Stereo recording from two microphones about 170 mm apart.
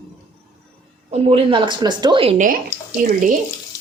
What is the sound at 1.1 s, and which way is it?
A woman's voice, 35° right (ahead or behind).